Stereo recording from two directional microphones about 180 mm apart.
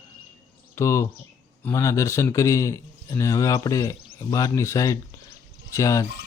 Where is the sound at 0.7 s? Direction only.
15° left (ahead or behind).